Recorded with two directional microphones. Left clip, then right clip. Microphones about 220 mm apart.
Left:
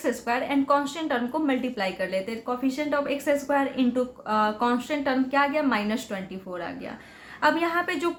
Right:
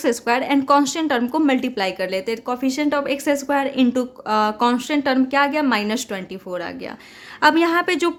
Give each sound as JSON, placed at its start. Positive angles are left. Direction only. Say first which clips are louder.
{"t": 0.0, "sound": "a woman's voice", "louder": "right 7 dB", "side_deg": -50}